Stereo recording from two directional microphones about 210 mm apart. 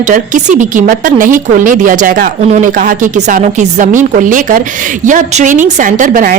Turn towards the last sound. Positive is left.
turn(degrees=-40)  # may be behind; listen again after turning